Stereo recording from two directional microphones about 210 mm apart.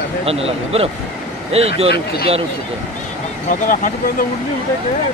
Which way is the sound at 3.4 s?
40° left (ahead or behind).